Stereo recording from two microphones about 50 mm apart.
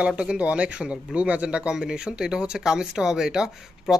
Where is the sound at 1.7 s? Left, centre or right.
Centre.